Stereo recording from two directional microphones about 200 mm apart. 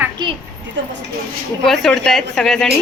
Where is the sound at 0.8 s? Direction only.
65° right (ahead or behind).